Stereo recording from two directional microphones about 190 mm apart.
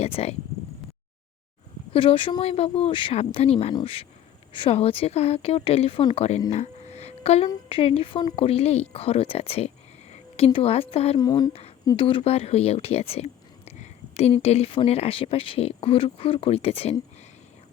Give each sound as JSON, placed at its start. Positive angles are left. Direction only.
{"t": 0.0, "sound": "speech", "side_deg": 35}
{"t": 1.9, "sound": "speech", "side_deg": 30}
{"t": 6.5, "sound": "a sound", "side_deg": 35}
{"t": 7.4, "sound": "speech", "side_deg": 30}
{"t": 11.2, "sound": "speech", "side_deg": 20}